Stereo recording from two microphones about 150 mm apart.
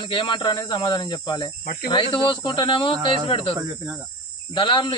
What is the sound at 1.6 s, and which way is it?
Speech, 65° left (ahead or behind).